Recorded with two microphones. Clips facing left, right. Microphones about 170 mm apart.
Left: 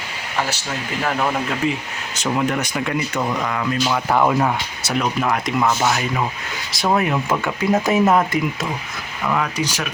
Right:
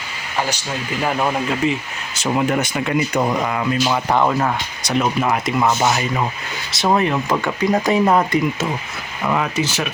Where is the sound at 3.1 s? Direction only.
25° right (ahead or behind).